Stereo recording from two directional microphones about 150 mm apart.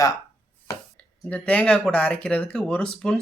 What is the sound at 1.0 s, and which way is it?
Speech, 10° left (ahead or behind).